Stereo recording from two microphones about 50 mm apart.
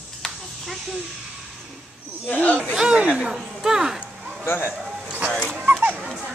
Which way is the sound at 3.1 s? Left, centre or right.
Centre.